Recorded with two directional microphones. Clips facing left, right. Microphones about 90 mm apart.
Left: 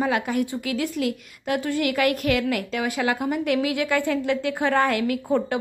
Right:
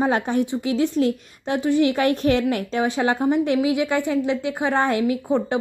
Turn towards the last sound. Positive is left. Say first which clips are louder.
# right 2 dB
turn(degrees=-20)  # may be behind; listen again after turning